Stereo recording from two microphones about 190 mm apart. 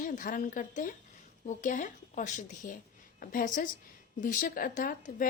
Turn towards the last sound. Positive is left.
turn(degrees=45)  # may be behind; listen again after turning